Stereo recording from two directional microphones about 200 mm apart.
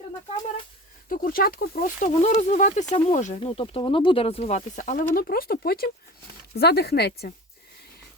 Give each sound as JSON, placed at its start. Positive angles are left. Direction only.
{"t": 1.1, "sound": "speech", "side_deg": 45}